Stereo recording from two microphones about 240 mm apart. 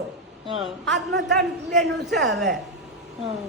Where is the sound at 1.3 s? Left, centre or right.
Centre.